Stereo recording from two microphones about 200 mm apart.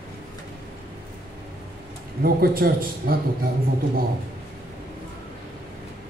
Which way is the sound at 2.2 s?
50° right (ahead or behind).